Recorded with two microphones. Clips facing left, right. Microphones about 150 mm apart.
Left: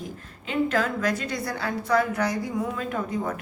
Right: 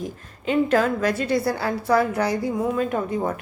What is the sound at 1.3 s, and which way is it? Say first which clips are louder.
A woman's voice: right 7 dB; 30° right (ahead or behind).